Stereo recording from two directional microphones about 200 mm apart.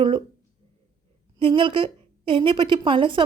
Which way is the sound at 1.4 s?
25° right (ahead or behind).